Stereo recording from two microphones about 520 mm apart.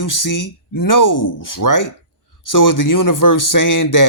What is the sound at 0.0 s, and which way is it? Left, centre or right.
Speech, left.